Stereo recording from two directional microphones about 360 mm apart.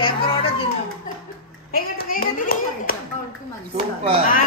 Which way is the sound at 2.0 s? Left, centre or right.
Left.